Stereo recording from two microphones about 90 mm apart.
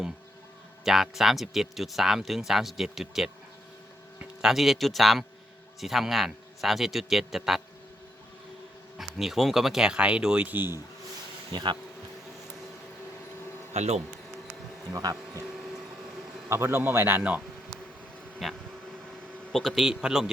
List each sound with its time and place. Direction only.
0.9 s speech: centre (ahead or behind)
4.4 s speech: 5° right (ahead or behind)
9.0 s speech: 5° right (ahead or behind); by 10.8 s 20° right (ahead or behind)
11.5 s speech: 60° right (ahead or behind)
16.5 s a man's voice: 30° right (ahead or behind)
18.4 s vehicle: centre (ahead or behind)
19.5 s speech: centre (ahead or behind)